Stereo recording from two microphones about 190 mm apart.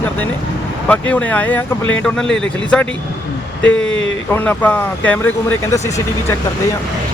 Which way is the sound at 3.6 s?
75° left (ahead or behind).